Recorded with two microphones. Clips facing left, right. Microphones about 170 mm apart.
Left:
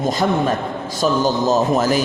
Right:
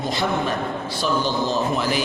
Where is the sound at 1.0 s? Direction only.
45° left (ahead or behind).